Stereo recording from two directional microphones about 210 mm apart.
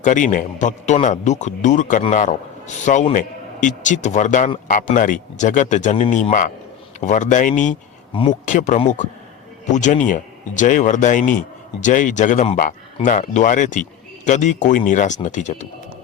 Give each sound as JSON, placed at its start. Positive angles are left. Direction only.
{"t": 0.0, "sound": "a man's voice", "side_deg": 35}
{"t": 8.1, "sound": "a man's voice", "side_deg": 25}
{"t": 8.4, "sound": "a man's voice", "side_deg": 35}